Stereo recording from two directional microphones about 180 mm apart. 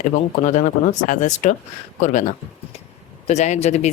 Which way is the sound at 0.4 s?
45° left (ahead or behind).